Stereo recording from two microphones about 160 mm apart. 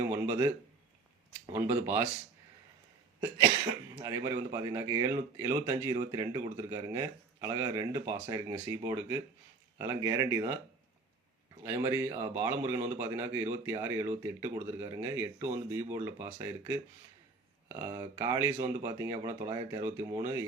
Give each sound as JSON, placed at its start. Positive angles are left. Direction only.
{"t": 0.1, "sound": "a man's voice", "side_deg": -15}
{"t": 1.5, "sound": "a man's voice", "side_deg": -15}
{"t": 4.0, "sound": "a man's voice", "side_deg": -20}
{"t": 11.6, "sound": "a man's voice", "side_deg": -15}